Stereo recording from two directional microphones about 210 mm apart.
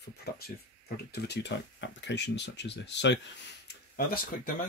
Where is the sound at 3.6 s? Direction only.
45° left (ahead or behind).